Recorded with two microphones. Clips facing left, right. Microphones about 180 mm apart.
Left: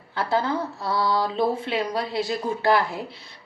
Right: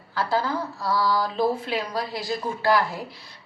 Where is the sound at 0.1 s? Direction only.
25° left (ahead or behind).